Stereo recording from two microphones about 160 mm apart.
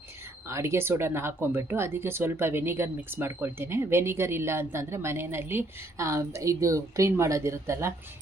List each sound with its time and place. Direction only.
0.4 s speech: 15° right (ahead or behind)